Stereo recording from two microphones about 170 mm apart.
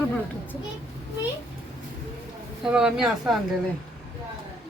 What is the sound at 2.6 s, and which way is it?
Speech, 5° right (ahead or behind).